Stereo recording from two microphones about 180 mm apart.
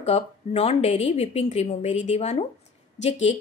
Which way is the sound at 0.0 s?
35° left (ahead or behind).